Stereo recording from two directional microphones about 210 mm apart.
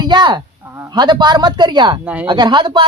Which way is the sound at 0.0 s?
20° right (ahead or behind).